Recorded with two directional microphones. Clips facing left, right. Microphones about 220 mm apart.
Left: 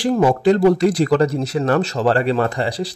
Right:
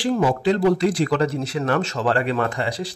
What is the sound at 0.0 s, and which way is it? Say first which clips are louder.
Speech: left 4 dB; 45° left (ahead or behind).